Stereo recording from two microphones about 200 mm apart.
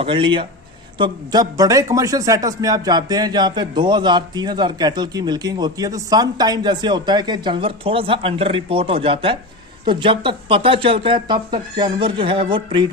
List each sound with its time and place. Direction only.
0.0 s a man's voice: 25° right (ahead or behind)